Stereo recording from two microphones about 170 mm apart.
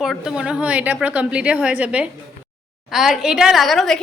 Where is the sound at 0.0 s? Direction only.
5° right (ahead or behind).